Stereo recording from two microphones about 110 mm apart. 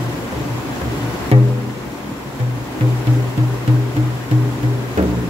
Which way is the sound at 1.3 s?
65° right (ahead or behind).